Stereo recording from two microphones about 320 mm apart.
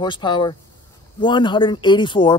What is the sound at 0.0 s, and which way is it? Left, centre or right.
Speech, centre.